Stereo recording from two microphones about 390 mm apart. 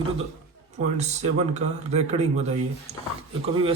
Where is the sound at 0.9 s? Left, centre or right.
Centre.